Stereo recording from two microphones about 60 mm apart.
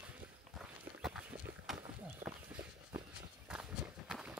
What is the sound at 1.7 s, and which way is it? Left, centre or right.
Walk, right.